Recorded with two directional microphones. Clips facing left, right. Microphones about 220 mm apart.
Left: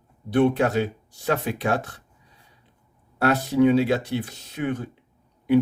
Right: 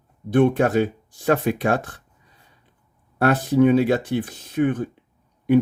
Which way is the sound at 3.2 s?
50° right (ahead or behind).